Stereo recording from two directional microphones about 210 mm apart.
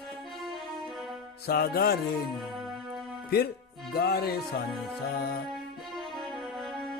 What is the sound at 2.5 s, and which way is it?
Music, centre (ahead or behind).